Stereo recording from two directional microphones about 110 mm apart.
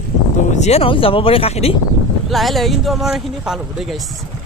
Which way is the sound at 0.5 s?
80° left.